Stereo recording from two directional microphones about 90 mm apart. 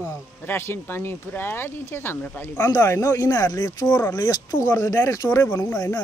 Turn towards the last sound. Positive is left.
turn(degrees=40)  # may be behind; listen again after turning